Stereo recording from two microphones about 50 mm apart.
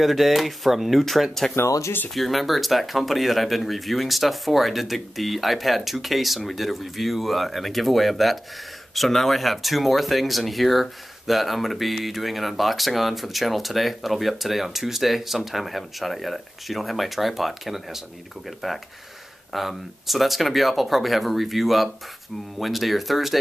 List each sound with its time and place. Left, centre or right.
0.0 s speech: centre
1.5 s speech: left
2.1 s speech: centre